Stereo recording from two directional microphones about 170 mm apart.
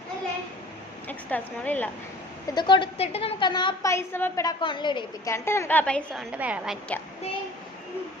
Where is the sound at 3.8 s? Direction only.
15° left (ahead or behind).